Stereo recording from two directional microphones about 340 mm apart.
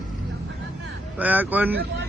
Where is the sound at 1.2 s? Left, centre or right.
Centre.